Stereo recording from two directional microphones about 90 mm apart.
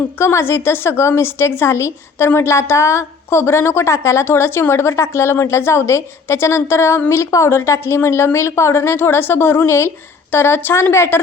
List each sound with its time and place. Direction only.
0.2 s a woman's voice: 30° left (ahead or behind)